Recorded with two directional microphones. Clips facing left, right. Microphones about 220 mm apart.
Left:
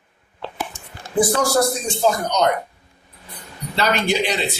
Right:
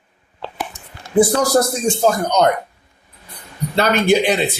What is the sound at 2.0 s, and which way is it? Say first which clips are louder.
Speech: right 2 dB; 50° right (ahead or behind).